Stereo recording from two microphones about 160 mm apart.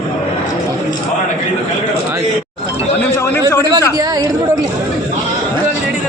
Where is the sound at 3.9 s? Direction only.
25° right (ahead or behind).